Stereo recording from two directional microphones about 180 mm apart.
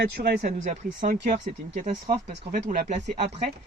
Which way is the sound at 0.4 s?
45° right (ahead or behind).